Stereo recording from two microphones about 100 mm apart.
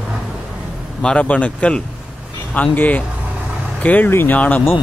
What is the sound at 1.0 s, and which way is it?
Speech, 10° left (ahead or behind).